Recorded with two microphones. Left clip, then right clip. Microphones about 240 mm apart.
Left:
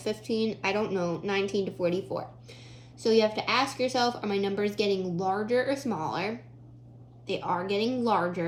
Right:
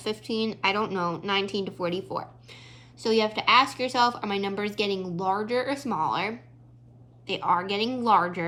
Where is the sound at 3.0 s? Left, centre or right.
Right.